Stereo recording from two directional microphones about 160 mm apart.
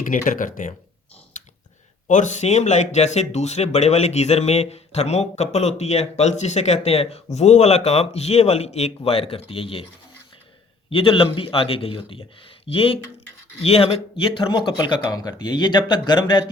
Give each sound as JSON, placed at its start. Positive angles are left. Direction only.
{"t": 0.0, "sound": "speech", "side_deg": 55}
{"t": 2.0, "sound": "a man's voice", "side_deg": 50}
{"t": 10.8, "sound": "a man's voice", "side_deg": 35}